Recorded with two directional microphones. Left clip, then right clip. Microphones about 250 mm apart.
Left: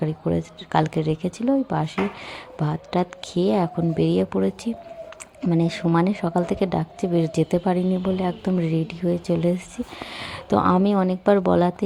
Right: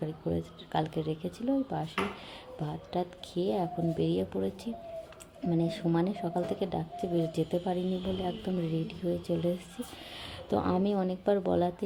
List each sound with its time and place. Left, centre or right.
0.0 s a woman's voice: centre